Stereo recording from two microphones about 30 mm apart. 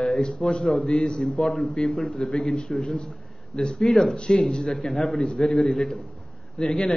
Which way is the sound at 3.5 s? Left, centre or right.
Left.